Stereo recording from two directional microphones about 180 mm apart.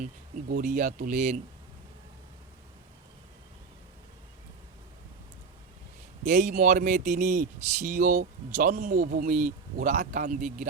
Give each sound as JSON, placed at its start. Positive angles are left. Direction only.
{"t": 0.3, "sound": "speech", "side_deg": -50}
{"t": 6.2, "sound": "a man's voice", "side_deg": -40}